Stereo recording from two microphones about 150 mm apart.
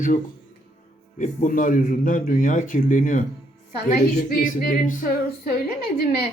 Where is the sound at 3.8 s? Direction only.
80° left.